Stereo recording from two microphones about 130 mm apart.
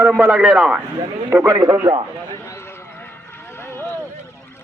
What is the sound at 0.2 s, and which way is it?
Speech, 5° right (ahead or behind).